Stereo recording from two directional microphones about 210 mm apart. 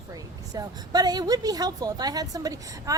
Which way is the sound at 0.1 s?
20° right (ahead or behind).